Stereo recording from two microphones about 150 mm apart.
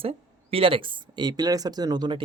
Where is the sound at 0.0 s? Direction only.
40° right (ahead or behind).